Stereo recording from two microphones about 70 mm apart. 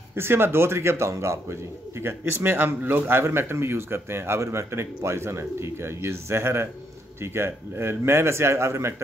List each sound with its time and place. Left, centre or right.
0.1 s speech: right